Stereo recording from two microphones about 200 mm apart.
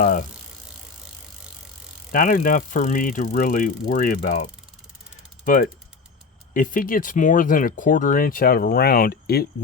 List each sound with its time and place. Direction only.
0.0 s speech: 40° left (ahead or behind)
2.1 s speech: 40° left (ahead or behind)
6.5 s speech: 40° left (ahead or behind)